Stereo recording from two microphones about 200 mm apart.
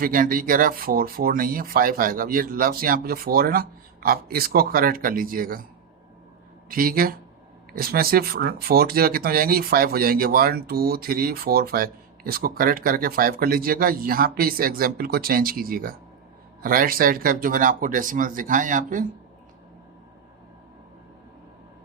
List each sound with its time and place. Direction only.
0.0 s speech: 45° right (ahead or behind)
6.7 s speech: 45° right (ahead or behind)